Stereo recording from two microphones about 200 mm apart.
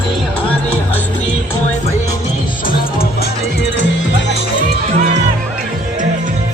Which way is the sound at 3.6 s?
60° left (ahead or behind).